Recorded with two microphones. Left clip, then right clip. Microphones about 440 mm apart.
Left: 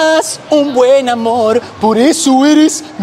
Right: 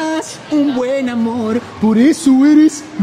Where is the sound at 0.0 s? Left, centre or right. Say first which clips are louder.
Left 9 dB; left.